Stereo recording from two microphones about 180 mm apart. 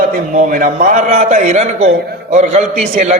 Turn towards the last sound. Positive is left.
turn(degrees=-40)  # may be behind; listen again after turning